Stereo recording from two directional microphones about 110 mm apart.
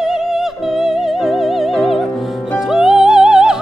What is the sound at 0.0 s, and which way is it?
Music, 5° right (ahead or behind).